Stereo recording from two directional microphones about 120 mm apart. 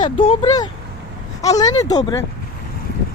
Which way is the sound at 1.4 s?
30° left (ahead or behind).